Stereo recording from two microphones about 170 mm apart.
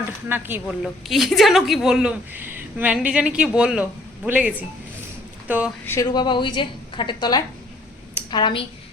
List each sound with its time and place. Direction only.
0.3 s a woman's voice: 10° right (ahead or behind)
0.8 s a woman's voice: centre (ahead or behind)
5.8 s speech: 15° left (ahead or behind)
6.1 s a woman's voice: 25° left (ahead or behind)